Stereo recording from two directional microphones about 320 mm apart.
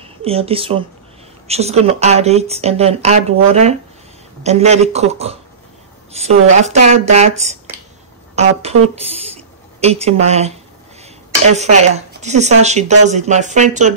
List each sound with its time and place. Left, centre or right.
0.0 s speech: centre
8.9 s speech: centre